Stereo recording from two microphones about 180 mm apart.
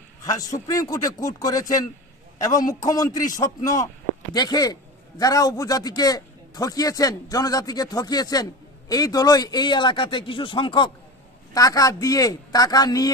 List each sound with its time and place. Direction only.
0.2 s a man's voice: 20° left (ahead or behind)